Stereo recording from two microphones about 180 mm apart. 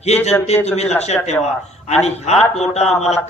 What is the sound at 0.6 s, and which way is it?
A man's voice, 35° left (ahead or behind).